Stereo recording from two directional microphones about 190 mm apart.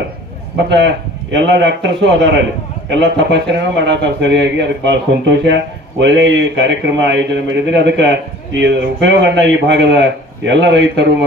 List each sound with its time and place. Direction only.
0.7 s speech: 65° right (ahead or behind)